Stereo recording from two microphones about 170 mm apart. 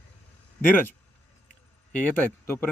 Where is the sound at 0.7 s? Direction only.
10° left (ahead or behind).